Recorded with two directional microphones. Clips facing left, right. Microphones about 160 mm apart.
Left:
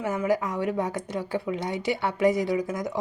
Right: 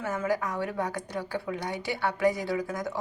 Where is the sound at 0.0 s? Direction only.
20° left (ahead or behind).